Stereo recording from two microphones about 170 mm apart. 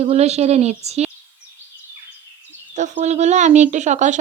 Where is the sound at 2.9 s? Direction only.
40° right (ahead or behind).